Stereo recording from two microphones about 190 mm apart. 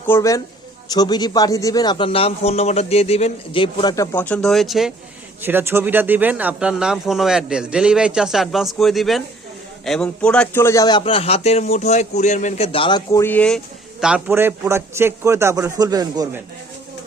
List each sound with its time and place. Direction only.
0.0 s a man's voice: 15° left (ahead or behind)
13.1 s speech: 15° left (ahead or behind)
14.0 s a man's voice: 10° right (ahead or behind)